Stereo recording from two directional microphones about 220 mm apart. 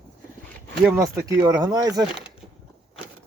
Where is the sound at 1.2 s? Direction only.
15° right (ahead or behind).